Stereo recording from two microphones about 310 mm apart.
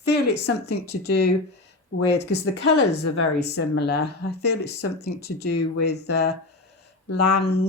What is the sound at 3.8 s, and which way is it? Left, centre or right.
Speech, left.